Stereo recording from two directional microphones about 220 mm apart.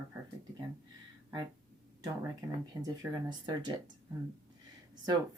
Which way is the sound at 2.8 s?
15° right (ahead or behind).